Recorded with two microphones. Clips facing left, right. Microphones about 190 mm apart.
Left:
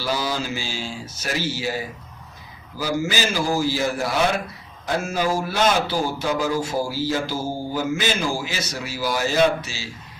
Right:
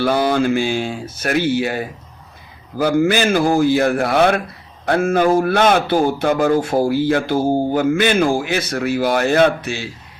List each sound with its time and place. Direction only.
0.0 s a man's voice: 55° right (ahead or behind)